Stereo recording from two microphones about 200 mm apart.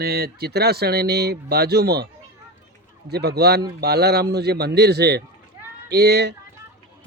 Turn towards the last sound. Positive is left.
turn(degrees=-55)  # may be behind; listen again after turning